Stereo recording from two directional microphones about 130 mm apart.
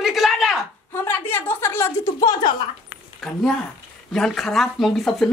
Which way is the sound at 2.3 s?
35° left (ahead or behind).